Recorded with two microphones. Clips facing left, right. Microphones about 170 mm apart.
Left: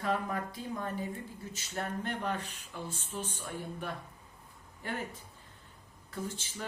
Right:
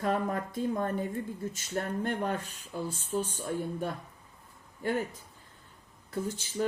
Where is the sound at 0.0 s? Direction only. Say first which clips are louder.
Right 3 dB; 45° right (ahead or behind).